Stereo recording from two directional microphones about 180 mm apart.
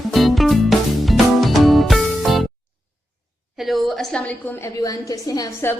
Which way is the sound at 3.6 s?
Centre (ahead or behind).